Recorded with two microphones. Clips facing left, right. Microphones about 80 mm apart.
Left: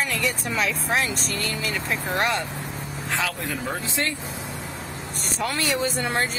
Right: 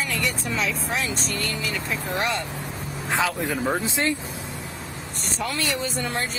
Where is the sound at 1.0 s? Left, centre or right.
Centre.